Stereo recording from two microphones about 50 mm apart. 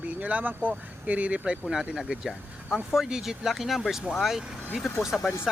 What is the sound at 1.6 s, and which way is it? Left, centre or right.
Speech, centre.